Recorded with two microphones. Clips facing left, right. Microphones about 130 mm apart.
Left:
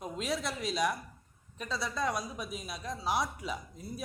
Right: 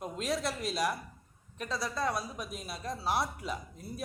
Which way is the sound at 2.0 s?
20° left (ahead or behind).